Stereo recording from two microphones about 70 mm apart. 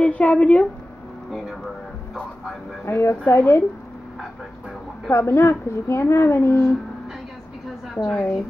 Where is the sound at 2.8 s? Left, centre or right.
Left.